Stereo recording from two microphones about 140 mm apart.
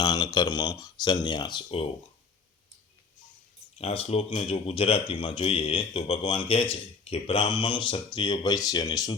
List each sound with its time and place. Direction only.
0.0 s a man's voice: 30° left (ahead or behind)
3.8 s a man's voice: 45° left (ahead or behind); by 9.1 s 25° left (ahead or behind)